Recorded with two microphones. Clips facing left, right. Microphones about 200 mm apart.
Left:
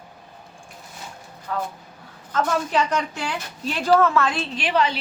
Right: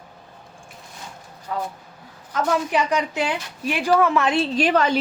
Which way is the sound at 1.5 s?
15° right (ahead or behind).